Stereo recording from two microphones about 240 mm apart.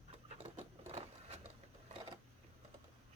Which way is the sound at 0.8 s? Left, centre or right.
Right.